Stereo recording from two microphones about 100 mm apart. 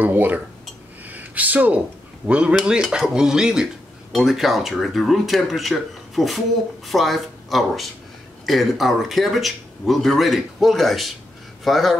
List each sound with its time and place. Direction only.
0.0 s speech: 20° right (ahead or behind)
1.0 s a sound: 15° right (ahead or behind)
2.2 s speech: 10° right (ahead or behind)